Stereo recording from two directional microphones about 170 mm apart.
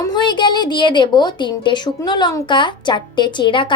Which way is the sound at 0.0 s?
25° left (ahead or behind).